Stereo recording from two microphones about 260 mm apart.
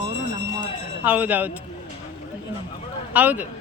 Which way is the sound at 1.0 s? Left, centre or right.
Centre.